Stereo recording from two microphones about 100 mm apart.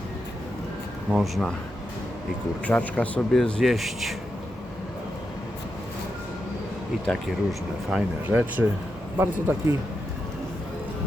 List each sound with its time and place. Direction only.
1.1 s speech: centre (ahead or behind)
2.6 s a man's voice: 15° left (ahead or behind)
3.3 s speech: centre (ahead or behind)
7.9 s speech: 5° right (ahead or behind)
8.3 s a man's voice: 15° right (ahead or behind)